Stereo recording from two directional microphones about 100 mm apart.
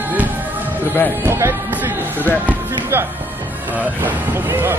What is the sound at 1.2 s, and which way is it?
Music, 25° right (ahead or behind).